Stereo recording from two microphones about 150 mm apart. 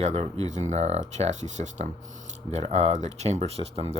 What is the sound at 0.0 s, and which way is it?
Speech, 45° right (ahead or behind).